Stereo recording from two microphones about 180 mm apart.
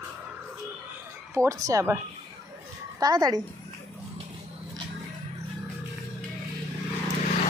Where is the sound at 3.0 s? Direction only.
20° right (ahead or behind).